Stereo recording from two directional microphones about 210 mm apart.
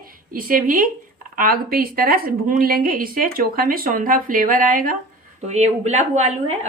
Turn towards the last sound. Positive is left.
turn(degrees=-30)  # may be behind; listen again after turning